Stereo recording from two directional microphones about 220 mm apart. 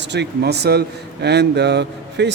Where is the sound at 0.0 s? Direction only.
50° right (ahead or behind).